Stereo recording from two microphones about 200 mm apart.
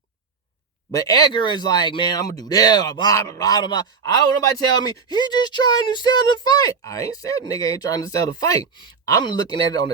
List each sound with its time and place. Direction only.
0.9 s speech: 20° left (ahead or behind)